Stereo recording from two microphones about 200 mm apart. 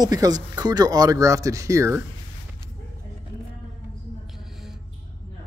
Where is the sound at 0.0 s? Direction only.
20° right (ahead or behind).